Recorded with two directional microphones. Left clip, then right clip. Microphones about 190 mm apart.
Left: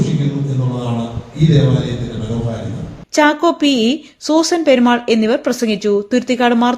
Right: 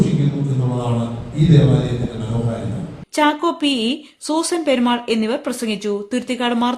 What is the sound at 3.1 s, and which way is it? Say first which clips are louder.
Speech: left 5 dB; 25° left (ahead or behind).